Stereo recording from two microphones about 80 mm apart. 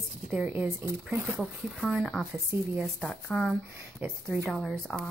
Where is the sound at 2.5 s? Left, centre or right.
Right.